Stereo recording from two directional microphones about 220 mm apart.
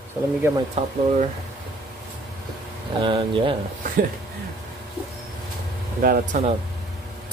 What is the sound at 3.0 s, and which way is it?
Speech, 20° right (ahead or behind).